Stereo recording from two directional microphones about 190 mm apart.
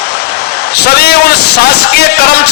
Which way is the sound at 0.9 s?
55° left (ahead or behind).